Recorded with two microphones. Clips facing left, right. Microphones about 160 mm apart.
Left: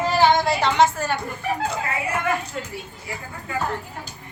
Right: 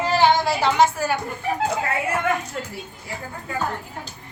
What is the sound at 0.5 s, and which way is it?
Speech, 5° right (ahead or behind).